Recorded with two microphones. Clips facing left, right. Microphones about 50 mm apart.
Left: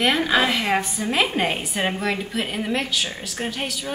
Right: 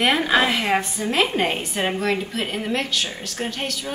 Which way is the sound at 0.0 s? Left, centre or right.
Centre.